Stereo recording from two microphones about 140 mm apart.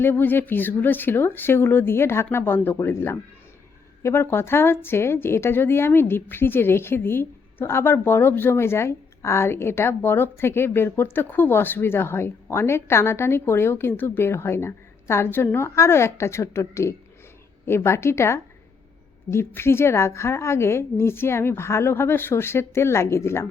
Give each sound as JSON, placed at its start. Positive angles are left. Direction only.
{"t": 0.0, "sound": "a woman's voice", "side_deg": 15}